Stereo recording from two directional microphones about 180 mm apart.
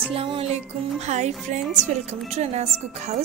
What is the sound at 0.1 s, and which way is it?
A woman's voice, 30° right (ahead or behind).